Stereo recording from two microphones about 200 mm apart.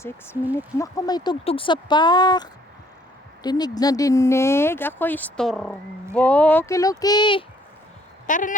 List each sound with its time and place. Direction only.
0.5 s speech: 15° left (ahead or behind)
8.3 s speech: 40° left (ahead or behind)